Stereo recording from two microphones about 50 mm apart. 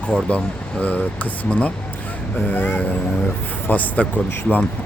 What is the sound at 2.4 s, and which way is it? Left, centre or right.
A man's voice, left.